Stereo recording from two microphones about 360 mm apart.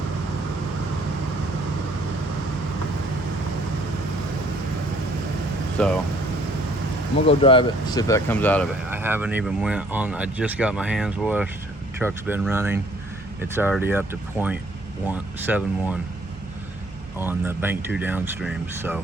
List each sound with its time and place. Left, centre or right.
5.8 s speech: centre
7.3 s speech: centre
8.9 s speech: centre
17.2 s speech: centre